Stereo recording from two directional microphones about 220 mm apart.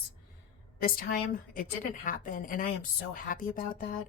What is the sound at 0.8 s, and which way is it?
A woman's voice, 40° left (ahead or behind).